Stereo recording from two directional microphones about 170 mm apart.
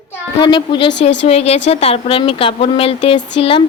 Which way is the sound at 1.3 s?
40° left (ahead or behind).